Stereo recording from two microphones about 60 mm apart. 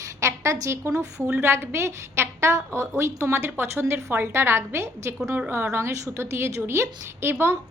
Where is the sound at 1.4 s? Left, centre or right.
Right.